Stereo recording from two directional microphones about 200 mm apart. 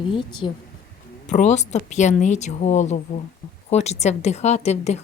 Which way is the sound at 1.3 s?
35° left (ahead or behind).